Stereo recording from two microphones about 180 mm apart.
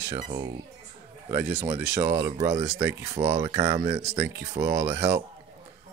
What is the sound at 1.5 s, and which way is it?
Speech, 30° right (ahead or behind).